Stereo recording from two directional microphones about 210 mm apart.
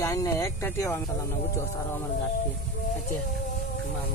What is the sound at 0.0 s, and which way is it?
Speech, 15° left (ahead or behind).